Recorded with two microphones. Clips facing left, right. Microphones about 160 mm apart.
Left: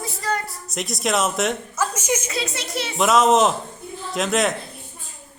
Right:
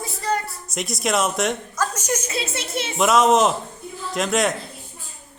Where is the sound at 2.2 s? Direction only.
25° right (ahead or behind).